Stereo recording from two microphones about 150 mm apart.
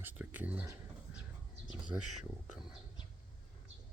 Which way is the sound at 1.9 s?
20° right (ahead or behind).